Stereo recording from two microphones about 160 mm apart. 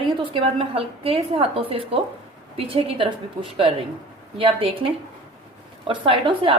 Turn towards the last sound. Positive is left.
turn(degrees=-35)  # may be behind; listen again after turning